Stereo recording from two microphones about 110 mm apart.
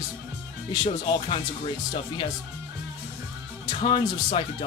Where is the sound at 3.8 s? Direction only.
50° left (ahead or behind).